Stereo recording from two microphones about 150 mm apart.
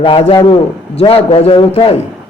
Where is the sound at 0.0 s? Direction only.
35° left (ahead or behind).